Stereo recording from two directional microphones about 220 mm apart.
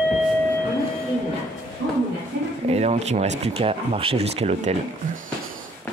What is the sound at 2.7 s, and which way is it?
Speech, 30° right (ahead or behind).